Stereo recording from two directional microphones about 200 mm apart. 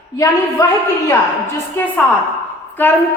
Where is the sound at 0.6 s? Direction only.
15° left (ahead or behind).